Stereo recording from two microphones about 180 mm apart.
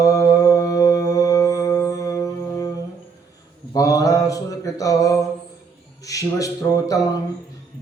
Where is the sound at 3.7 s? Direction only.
20° left (ahead or behind).